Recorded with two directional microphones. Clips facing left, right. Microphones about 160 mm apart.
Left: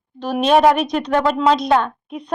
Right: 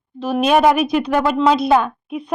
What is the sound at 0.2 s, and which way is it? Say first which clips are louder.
A woman's voice: even; 5° right (ahead or behind).